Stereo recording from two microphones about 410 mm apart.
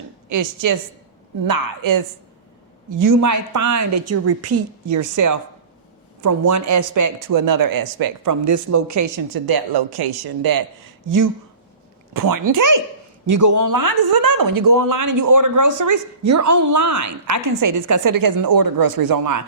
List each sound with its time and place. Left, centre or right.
0.3 s speech: right
12.1 s speech: right